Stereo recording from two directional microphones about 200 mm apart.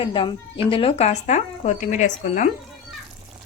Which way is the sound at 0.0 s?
25° left (ahead or behind).